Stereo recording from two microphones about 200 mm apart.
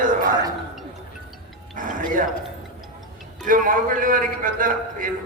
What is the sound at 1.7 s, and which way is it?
Speech, 40° right (ahead or behind).